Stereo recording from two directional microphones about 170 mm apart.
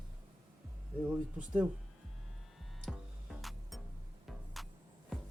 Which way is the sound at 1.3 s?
5° right (ahead or behind).